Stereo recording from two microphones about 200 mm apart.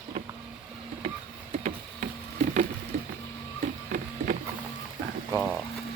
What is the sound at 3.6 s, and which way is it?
Printer, 45° right (ahead or behind).